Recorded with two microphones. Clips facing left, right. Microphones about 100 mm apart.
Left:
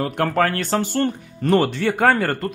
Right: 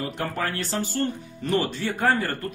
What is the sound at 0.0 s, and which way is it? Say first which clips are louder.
A man's voice: left 9 dB; 65° left (ahead or behind).